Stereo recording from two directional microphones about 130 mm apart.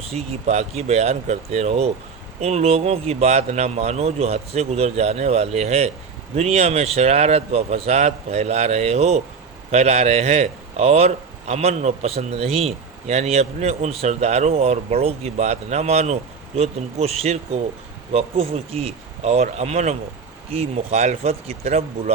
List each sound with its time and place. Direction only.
0.0 s a man's voice: 50° right (ahead or behind)